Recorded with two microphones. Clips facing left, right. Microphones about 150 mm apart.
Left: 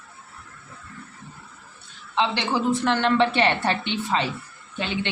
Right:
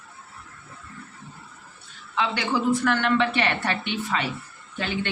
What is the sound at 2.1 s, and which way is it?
A woman's voice, 25° left (ahead or behind).